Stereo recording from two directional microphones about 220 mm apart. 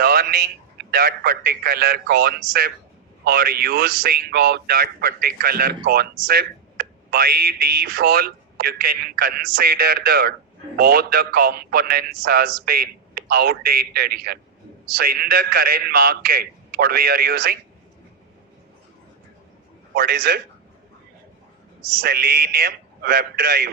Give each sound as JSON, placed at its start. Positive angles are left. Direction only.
{"t": 0.0, "sound": "a man's voice", "side_deg": -45}
{"t": 19.9, "sound": "a man's voice", "side_deg": -45}
{"t": 21.9, "sound": "a man's voice", "side_deg": -45}